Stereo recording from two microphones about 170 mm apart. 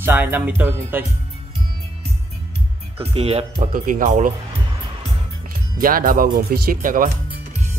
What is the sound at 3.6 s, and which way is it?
Speech, 55° right (ahead or behind).